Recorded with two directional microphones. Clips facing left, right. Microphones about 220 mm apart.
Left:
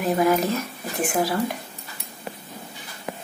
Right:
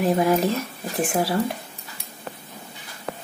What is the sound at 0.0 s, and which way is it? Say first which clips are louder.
Speech: right 1 dB; 30° right (ahead or behind).